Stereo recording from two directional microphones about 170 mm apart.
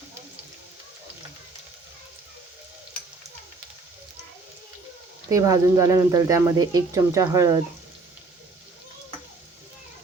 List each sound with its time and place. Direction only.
5.3 s speech: 20° right (ahead or behind)